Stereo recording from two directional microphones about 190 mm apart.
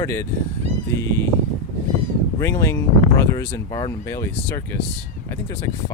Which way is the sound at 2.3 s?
15° left (ahead or behind).